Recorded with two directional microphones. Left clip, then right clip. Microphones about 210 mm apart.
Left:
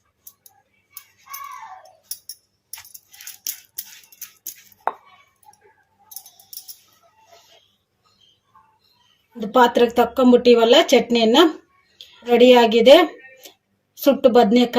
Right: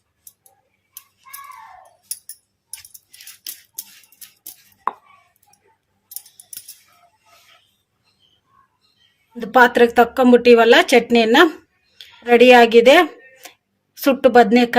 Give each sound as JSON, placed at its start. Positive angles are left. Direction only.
{"t": 9.5, "sound": "a woman's voice", "side_deg": -50}
{"t": 14.0, "sound": "speech", "side_deg": -50}